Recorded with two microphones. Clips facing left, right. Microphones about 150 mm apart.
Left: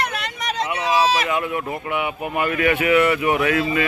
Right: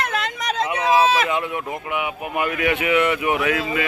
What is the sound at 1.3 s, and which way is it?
Speech, 20° right (ahead or behind).